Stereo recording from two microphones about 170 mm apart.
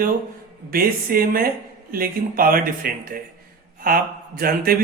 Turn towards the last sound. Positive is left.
turn(degrees=-60)  # may be behind; listen again after turning